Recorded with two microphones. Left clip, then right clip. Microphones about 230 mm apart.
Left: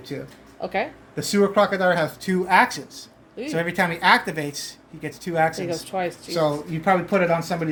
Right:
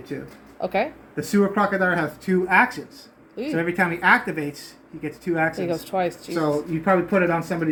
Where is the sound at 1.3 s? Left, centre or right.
Left.